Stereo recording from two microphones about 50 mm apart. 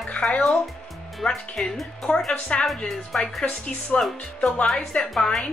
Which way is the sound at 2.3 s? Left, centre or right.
Left.